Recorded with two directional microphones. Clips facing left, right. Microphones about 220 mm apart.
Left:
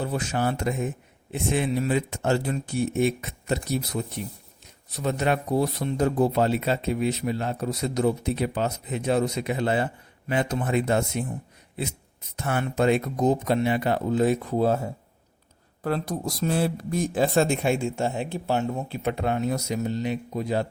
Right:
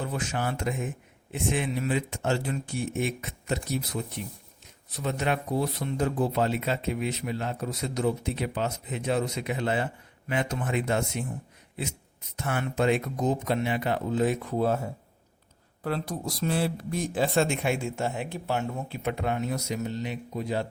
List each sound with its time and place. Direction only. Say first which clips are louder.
0.0 s speech: left 4 dB; 35° left (ahead or behind)
5.0 s speech: left 4 dB; 40° left (ahead or behind)
12.4 s speech: left 3 dB; 35° left (ahead or behind)
15.8 s speech: left 4 dB; 45° left (ahead or behind)